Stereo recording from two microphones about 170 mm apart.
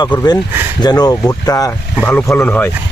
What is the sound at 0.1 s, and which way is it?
Speech, 20° left (ahead or behind).